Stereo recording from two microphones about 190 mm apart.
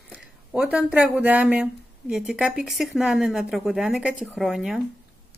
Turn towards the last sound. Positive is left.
turn(degrees=0)  # may be behind; listen again after turning